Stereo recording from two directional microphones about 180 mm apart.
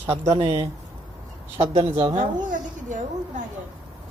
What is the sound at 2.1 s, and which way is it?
Speech, 45° right (ahead or behind).